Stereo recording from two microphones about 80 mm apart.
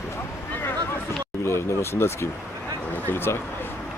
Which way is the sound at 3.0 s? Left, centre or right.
Left.